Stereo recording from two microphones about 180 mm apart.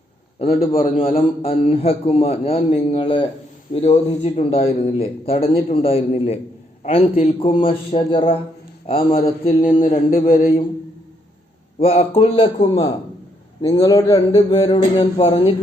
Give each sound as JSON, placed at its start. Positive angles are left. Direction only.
{"t": 0.5, "sound": "a man's voice", "side_deg": 55}
{"t": 1.1, "sound": "a man's voice", "side_deg": 30}
{"t": 11.8, "sound": "a man's voice", "side_deg": 35}